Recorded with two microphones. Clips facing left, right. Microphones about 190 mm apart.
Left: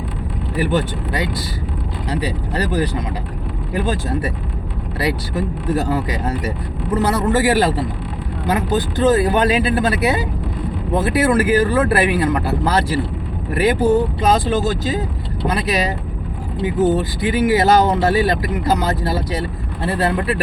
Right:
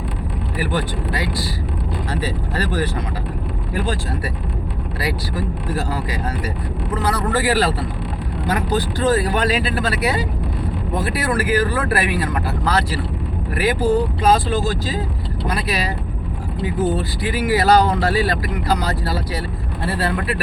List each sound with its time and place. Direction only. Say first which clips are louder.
0.5 s speech: left 4 dB; 25° left (ahead or behind)